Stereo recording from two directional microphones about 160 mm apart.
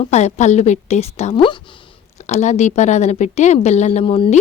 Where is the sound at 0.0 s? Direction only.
45° left (ahead or behind).